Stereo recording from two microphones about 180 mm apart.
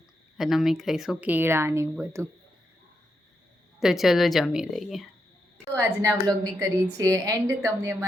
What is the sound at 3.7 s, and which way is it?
Speech, centre (ahead or behind).